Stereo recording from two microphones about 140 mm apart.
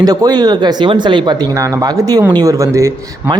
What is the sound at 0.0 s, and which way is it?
Speech, 25° right (ahead or behind).